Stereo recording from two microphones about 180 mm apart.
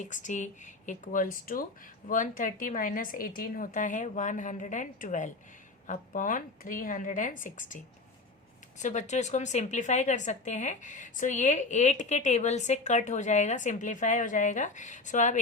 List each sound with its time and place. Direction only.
0.0 s a woman's voice: 45° left (ahead or behind)
8.8 s a woman's voice: 40° left (ahead or behind)